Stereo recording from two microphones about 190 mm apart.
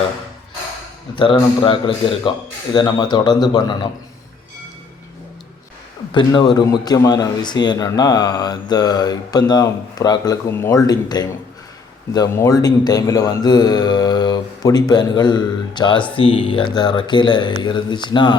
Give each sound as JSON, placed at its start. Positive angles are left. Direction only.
{"t": 1.1, "sound": "speech", "side_deg": 25}
{"t": 6.1, "sound": "speech", "side_deg": 25}